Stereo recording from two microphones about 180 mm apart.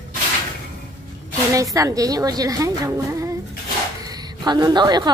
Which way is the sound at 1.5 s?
20° right (ahead or behind).